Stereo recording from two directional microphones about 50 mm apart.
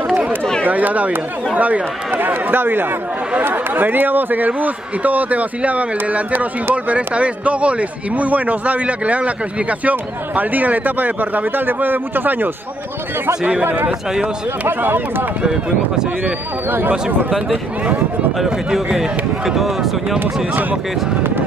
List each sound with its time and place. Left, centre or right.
0.7 s a man's voice: right
14.7 s speech: right
15.4 s speech: centre
18.9 s speech: centre